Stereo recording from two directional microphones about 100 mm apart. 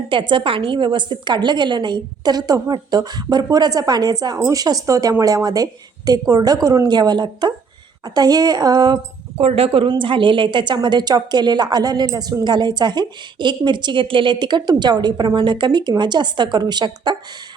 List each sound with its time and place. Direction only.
0.1 s a woman's voice: 55° right (ahead or behind)
9.4 s a woman's voice: 70° right (ahead or behind); by 17.2 s 50° right (ahead or behind)